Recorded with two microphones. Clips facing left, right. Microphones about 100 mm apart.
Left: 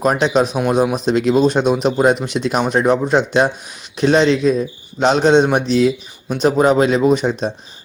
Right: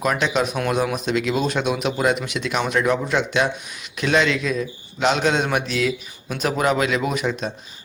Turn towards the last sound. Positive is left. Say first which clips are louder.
# left 8 dB
turn(degrees=35)  # may be behind; listen again after turning